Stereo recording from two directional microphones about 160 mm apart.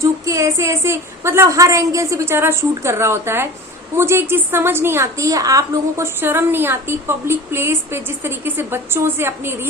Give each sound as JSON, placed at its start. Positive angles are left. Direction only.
{"t": 0.0, "sound": "a woman's voice", "side_deg": -20}